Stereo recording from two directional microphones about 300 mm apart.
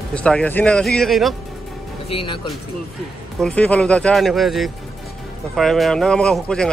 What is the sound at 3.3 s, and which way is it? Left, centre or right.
Speech, centre.